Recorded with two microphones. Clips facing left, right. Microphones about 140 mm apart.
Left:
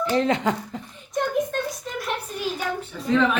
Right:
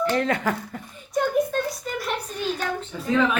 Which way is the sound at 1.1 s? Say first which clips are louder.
Right 2 dB; centre (ahead or behind).